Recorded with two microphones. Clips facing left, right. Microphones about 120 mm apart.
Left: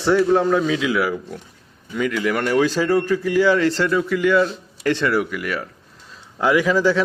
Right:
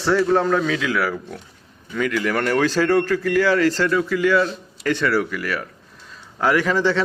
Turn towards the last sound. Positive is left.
turn(degrees=10)  # may be behind; listen again after turning